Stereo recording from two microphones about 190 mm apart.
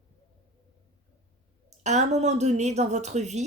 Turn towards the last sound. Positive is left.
turn(degrees=-35)  # may be behind; listen again after turning